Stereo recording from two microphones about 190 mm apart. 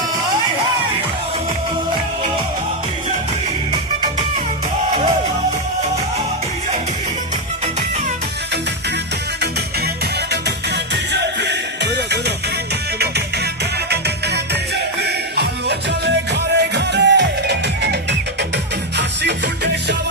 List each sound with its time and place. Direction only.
11.1 s music: 65° right (ahead or behind)
16.0 s music: 65° right (ahead or behind)